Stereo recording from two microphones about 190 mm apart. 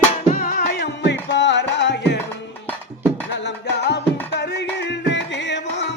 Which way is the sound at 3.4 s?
60° left (ahead or behind).